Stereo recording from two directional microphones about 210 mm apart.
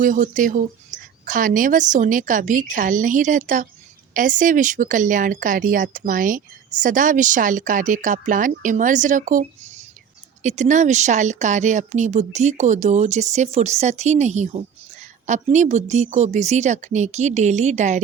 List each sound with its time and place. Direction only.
0.0 s speech: 40° right (ahead or behind)